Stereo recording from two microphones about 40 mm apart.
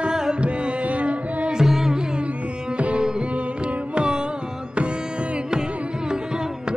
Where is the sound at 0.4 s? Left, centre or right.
Right.